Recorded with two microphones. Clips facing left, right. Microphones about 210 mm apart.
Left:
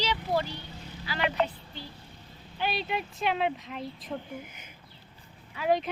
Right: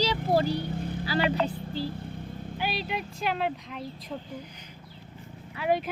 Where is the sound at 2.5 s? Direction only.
5° right (ahead or behind).